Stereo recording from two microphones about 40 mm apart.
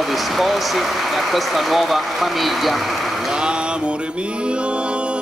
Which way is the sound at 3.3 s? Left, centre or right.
Right.